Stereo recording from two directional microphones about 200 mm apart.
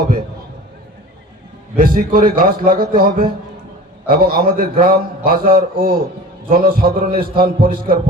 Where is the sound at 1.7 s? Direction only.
45° right (ahead or behind).